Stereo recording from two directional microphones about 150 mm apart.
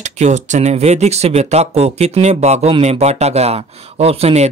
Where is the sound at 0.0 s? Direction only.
50° right (ahead or behind).